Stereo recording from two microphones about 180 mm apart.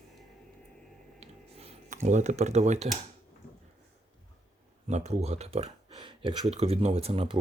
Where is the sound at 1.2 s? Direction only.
35° right (ahead or behind).